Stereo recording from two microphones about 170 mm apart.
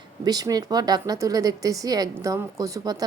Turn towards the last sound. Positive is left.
turn(degrees=-20)  # may be behind; listen again after turning